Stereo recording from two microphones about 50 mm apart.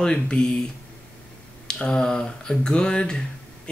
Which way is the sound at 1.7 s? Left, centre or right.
Centre.